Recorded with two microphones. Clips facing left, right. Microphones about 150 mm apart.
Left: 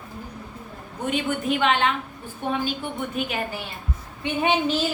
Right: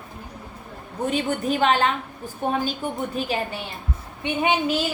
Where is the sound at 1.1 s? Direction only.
35° right (ahead or behind).